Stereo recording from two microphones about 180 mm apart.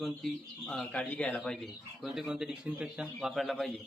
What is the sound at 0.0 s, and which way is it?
A man's voice, centre (ahead or behind).